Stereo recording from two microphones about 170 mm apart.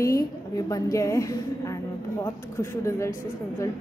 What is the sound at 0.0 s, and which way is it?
A woman's voice, 20° left (ahead or behind).